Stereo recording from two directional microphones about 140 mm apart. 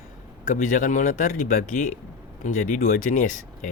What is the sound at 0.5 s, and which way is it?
Speech, 70° left (ahead or behind).